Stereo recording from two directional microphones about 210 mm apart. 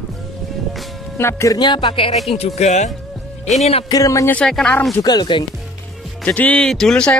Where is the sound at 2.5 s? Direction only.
35° left (ahead or behind).